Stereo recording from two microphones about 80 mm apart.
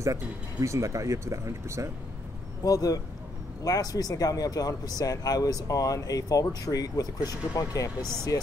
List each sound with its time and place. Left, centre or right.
0.0 s speech: right
2.6 s speech: left